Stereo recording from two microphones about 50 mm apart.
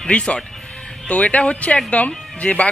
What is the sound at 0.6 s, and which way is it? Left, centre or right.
Music, left.